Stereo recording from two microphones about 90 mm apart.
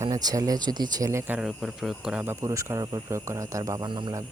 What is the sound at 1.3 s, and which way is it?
Speech, 10° right (ahead or behind).